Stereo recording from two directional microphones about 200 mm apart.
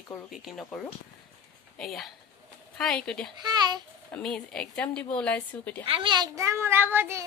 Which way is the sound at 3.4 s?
20° right (ahead or behind).